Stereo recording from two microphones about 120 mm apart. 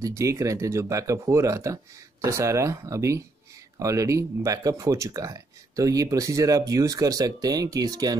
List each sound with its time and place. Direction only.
0.0 s speech: 25° right (ahead or behind)